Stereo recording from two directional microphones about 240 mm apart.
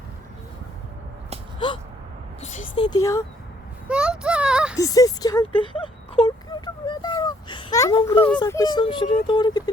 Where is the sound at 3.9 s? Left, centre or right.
Centre.